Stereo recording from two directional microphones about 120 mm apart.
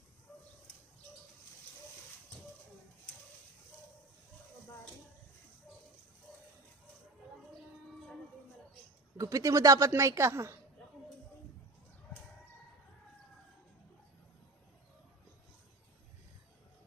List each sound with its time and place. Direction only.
9.1 s a woman's voice: 30° right (ahead or behind)